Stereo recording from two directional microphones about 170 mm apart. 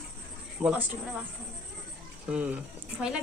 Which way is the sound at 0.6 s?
10° right (ahead or behind).